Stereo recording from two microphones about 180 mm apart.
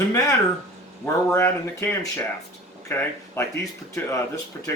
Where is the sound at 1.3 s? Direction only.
15° left (ahead or behind).